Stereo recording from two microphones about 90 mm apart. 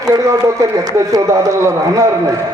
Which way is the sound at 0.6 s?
40° right (ahead or behind).